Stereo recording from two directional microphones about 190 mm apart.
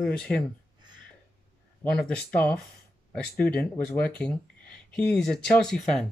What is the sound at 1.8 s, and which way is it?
Speech, 10° left (ahead or behind).